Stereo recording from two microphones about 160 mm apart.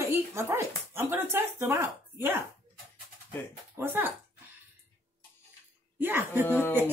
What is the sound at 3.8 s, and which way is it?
Speech, 15° right (ahead or behind).